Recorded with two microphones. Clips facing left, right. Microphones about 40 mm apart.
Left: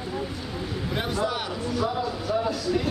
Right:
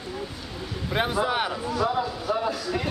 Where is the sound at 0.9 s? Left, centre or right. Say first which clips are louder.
Right 4 dB; right.